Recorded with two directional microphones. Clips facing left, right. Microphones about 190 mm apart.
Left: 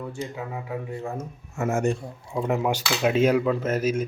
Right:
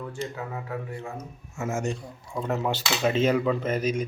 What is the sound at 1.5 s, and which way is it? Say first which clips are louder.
Speech: left 5 dB; 60° left (ahead or behind).